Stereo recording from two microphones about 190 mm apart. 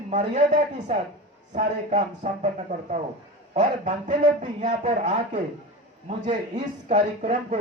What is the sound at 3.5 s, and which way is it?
Speech, 40° right (ahead or behind).